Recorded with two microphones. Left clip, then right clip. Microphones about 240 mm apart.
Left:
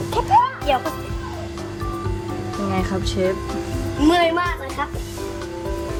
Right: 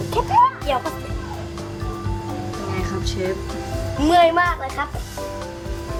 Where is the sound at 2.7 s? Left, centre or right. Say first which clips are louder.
Left 4 dB; centre.